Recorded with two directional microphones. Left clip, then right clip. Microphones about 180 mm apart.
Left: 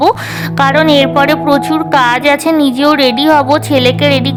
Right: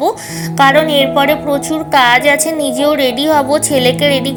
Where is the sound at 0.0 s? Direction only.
25° left (ahead or behind).